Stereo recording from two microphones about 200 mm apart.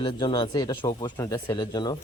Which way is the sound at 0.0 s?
25° left (ahead or behind).